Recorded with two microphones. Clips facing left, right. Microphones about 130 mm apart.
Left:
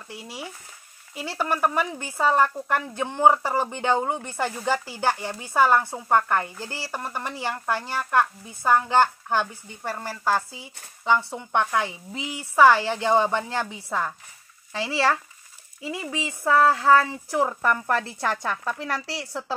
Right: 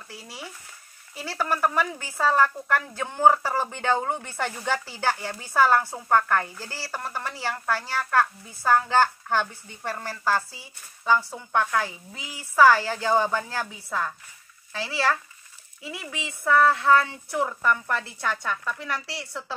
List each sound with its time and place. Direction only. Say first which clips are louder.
0.1 s speech: left 4 dB; 15° left (ahead or behind); by 19.5 s 35° left (ahead or behind)